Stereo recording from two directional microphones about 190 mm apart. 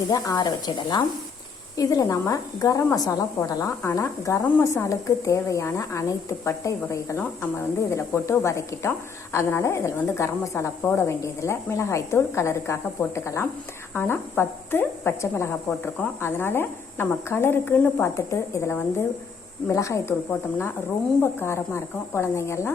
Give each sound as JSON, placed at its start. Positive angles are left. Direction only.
{"t": 0.1, "sound": "a woman's voice", "side_deg": 20}
{"t": 21.3, "sound": "a woman's voice", "side_deg": 15}